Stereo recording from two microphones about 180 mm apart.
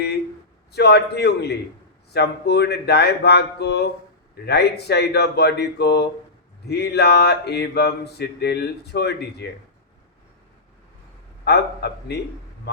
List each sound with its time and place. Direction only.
0.7 s mantra: 65° left (ahead or behind)
11.4 s mantra: 65° left (ahead or behind)
12.7 s speech: 65° left (ahead or behind)